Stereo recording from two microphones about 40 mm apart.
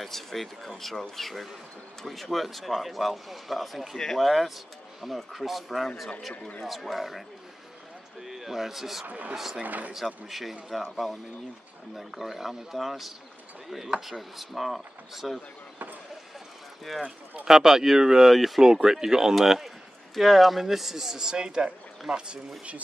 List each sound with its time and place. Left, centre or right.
0.0 s a man's voice: centre
9.6 s speech: right
10.7 s speech: centre
14.3 s speech: centre
16.9 s speech: centre
17.5 s speech: centre
18.3 s speech: centre
18.6 s speech: centre